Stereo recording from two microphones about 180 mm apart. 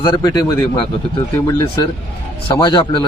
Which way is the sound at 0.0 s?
25° left (ahead or behind).